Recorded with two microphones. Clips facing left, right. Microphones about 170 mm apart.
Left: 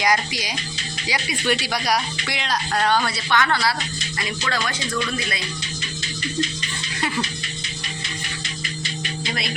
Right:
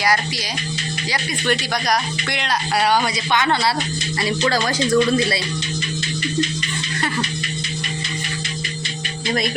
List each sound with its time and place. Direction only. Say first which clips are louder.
0.0 s speech: right 1 dB; 15° left (ahead or behind); by 2.6 s centre (ahead or behind)
2.7 s a man's voice: right 3 dB; 10° right (ahead or behind)
4.2 s speech: right 7 dB; 35° right (ahead or behind)